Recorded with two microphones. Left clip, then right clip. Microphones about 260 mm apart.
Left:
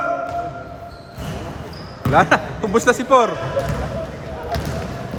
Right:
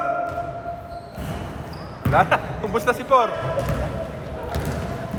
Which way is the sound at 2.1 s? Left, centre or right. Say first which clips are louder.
Left 4 dB; left.